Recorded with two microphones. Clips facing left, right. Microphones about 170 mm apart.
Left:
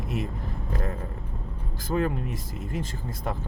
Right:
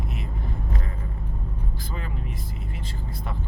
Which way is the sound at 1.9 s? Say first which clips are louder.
Left 14 dB; 55° left (ahead or behind).